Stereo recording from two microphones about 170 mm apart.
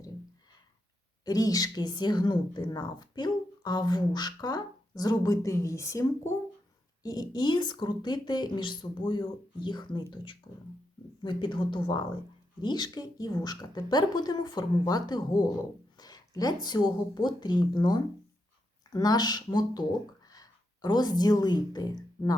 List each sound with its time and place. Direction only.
1.2 s a woman's voice: 20° left (ahead or behind)